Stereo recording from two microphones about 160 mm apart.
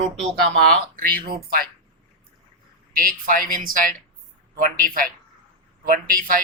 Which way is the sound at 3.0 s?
60° right (ahead or behind).